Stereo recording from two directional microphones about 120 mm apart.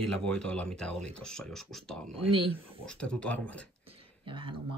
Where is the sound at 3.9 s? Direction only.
45° right (ahead or behind).